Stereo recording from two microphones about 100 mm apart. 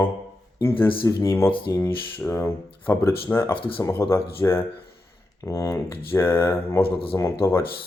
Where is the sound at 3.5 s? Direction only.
60° left (ahead or behind).